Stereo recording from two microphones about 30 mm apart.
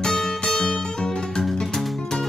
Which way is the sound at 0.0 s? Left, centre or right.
Centre.